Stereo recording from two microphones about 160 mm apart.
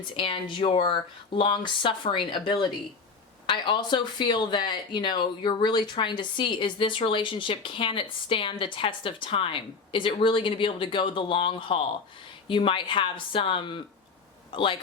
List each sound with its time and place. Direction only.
0.2 s speech: 30° left (ahead or behind)